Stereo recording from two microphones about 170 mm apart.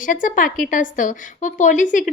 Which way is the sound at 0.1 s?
50° left (ahead or behind).